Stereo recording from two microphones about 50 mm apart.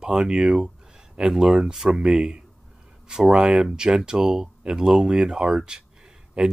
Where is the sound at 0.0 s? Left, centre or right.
Centre.